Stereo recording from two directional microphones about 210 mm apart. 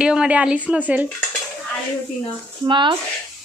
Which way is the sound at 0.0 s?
5° right (ahead or behind).